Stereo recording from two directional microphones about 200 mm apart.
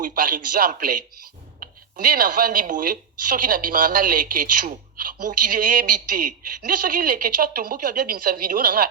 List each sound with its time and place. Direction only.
0.0 s a woman's voice: 45° right (ahead or behind)